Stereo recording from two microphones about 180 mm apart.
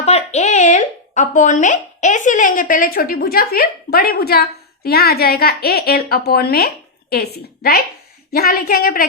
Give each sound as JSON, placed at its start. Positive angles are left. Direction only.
{"t": 0.0, "sound": "speech", "side_deg": 35}